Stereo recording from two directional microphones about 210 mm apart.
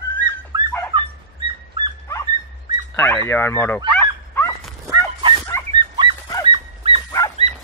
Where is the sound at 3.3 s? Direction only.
10° left (ahead or behind).